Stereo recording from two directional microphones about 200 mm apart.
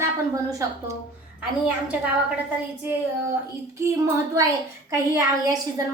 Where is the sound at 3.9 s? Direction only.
15° right (ahead or behind).